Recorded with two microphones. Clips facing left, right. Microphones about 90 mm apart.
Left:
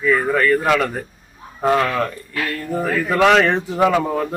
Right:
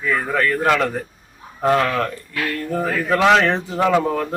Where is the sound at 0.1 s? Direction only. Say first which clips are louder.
Left 4 dB; centre (ahead or behind).